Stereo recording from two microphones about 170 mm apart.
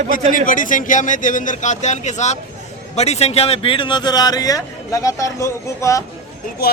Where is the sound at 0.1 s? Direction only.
55° left (ahead or behind); by 6.0 s 20° left (ahead or behind).